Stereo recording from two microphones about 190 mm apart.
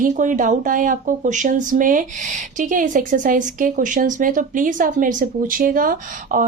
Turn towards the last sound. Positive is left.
turn(degrees=-45)  # may be behind; listen again after turning